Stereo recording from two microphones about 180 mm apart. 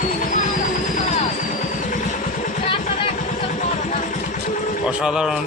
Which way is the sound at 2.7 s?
35° left (ahead or behind).